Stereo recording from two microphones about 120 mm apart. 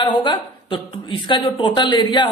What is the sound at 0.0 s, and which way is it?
A woman's voice, 40° left (ahead or behind).